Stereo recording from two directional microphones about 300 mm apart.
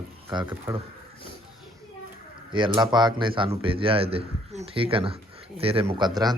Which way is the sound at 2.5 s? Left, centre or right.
Centre.